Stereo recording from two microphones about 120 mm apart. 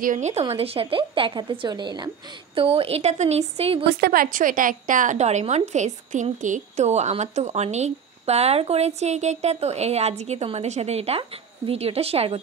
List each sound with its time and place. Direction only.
0.1 s a woman's voice: 70° right (ahead or behind)
0.4 s a woman's voice: 55° right (ahead or behind); by 2.0 s 40° right (ahead or behind)
2.5 s a woman's voice: 50° right (ahead or behind)
4.4 s a woman's voice: 90° right; by 12.4 s 55° right (ahead or behind)